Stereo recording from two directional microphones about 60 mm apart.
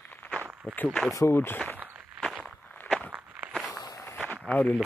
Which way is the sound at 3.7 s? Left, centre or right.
Left.